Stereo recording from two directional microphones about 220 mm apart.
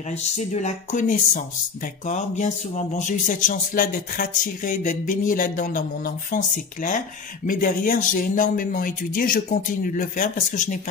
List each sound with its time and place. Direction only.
0.1 s speech: 30° left (ahead or behind)